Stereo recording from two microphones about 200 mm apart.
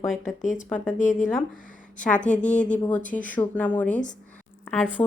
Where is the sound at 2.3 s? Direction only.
40° left (ahead or behind).